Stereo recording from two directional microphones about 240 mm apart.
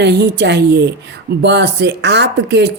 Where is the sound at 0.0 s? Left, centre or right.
Right.